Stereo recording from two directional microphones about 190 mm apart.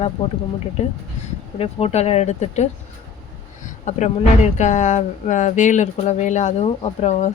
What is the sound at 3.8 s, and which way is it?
Speech, 40° left (ahead or behind).